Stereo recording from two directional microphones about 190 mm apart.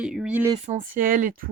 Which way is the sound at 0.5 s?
35° right (ahead or behind).